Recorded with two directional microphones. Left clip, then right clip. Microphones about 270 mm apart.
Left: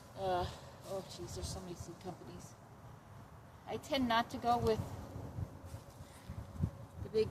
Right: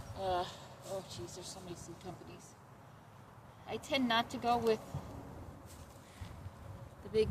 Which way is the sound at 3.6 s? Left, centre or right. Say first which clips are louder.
Right 1 dB; centre.